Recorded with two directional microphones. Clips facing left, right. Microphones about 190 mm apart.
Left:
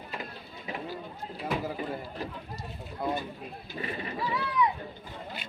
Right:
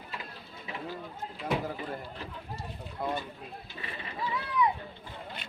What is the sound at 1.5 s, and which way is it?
Speech, 5° left (ahead or behind).